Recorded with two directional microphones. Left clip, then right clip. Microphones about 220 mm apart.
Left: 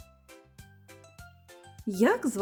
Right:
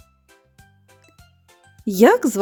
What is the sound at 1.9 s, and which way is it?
Speech, 40° right (ahead or behind).